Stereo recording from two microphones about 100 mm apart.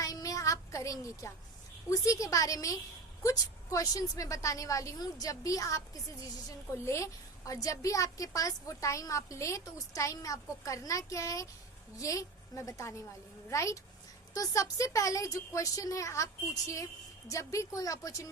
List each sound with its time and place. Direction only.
0.0 s child singing: 35° left (ahead or behind)
1.9 s a woman's voice: 35° left (ahead or behind)